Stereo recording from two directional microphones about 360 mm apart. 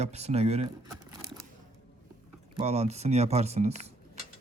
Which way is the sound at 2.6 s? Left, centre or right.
Centre.